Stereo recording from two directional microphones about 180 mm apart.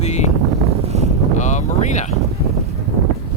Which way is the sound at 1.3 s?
40° left (ahead or behind).